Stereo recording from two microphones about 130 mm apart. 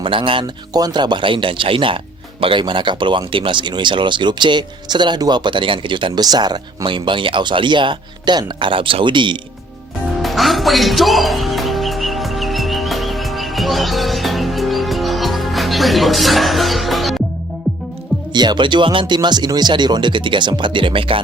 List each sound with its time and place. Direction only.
0.0 s speech: 40° right (ahead or behind)
10.2 s music: centre (ahead or behind)
18.3 s speech: 35° right (ahead or behind)